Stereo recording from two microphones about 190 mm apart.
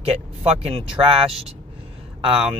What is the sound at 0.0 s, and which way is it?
Speech, 30° right (ahead or behind).